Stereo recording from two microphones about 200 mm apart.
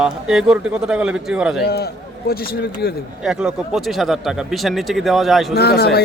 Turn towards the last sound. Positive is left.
turn(degrees=50)  # may be behind; listen again after turning